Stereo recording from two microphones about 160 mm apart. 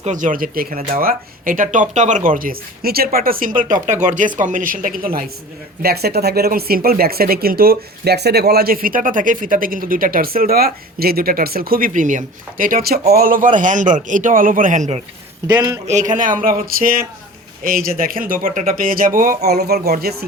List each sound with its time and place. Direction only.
0.0 s speech: 50° right (ahead or behind)
5.8 s a man's voice: 80° right; by 15.0 s 45° right (ahead or behind)
15.4 s a man's voice: 20° right (ahead or behind)
15.9 s speech: 50° right (ahead or behind); by 20.1 s 75° right (ahead or behind)